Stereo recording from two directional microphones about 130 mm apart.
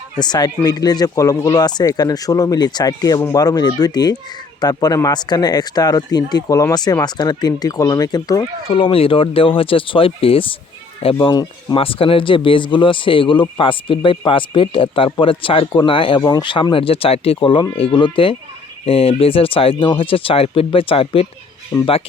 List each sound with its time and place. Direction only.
0.2 s speech: 30° left (ahead or behind)
8.7 s speech: 45° left (ahead or behind)